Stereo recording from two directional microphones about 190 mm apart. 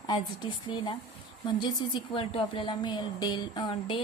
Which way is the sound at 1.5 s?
25° left (ahead or behind).